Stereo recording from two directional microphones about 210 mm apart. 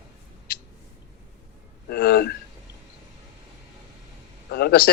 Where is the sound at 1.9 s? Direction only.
55° left (ahead or behind).